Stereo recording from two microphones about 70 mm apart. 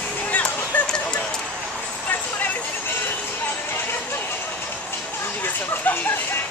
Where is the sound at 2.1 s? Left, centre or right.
Left.